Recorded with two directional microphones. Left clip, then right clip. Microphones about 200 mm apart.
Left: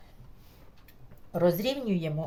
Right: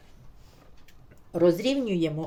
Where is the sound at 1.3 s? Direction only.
20° right (ahead or behind).